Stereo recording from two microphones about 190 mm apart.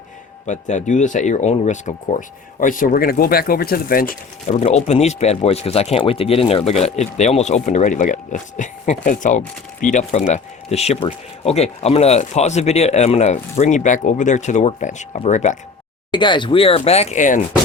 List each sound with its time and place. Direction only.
0.4 s speech: 40° left (ahead or behind)
16.1 s speech: 25° left (ahead or behind); by 17.4 s 40° left (ahead or behind)